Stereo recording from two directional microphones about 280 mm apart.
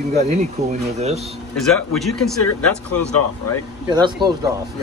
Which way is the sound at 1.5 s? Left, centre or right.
Centre.